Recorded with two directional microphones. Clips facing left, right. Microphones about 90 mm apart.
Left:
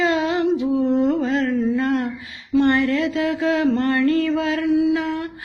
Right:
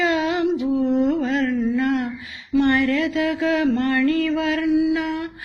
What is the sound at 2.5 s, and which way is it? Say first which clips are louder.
Mantra: left 1 dB; 25° left (ahead or behind).